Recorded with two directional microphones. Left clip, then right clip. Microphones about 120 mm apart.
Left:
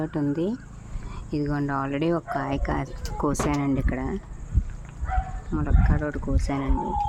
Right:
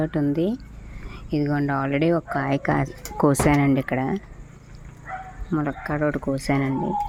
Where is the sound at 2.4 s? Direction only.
30° right (ahead or behind).